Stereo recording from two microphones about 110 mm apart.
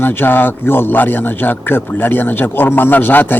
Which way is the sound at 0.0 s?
20° left (ahead or behind).